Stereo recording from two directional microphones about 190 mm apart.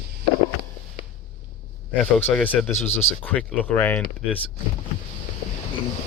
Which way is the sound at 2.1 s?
5° left (ahead or behind).